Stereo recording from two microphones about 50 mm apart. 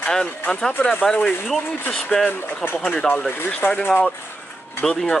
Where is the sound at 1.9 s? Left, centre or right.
Centre.